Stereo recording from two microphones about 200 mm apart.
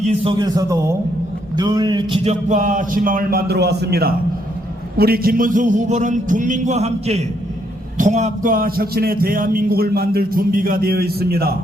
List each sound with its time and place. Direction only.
0.1 s a man's voice: 25° right (ahead or behind); by 11.5 s 50° right (ahead or behind)